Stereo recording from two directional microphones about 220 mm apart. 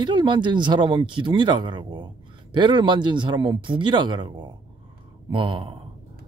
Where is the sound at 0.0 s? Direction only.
20° right (ahead or behind).